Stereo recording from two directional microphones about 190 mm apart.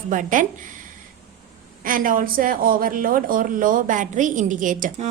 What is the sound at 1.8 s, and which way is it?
Speech, 45° right (ahead or behind).